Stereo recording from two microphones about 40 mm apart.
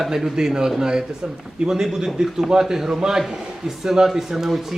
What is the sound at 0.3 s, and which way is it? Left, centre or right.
A man's voice, centre.